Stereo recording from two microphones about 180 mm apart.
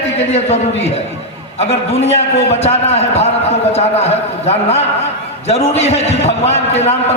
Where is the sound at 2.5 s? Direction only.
35° left (ahead or behind).